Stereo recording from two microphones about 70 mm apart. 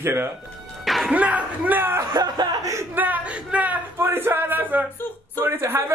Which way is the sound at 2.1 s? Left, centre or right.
Right.